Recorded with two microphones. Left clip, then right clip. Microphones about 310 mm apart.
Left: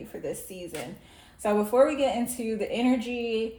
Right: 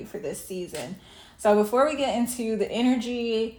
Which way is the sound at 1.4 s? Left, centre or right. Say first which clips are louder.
Right 2 dB; right.